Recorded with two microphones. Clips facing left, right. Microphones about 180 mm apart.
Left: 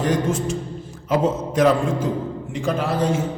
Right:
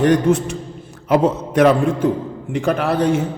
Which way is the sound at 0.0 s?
65° right (ahead or behind).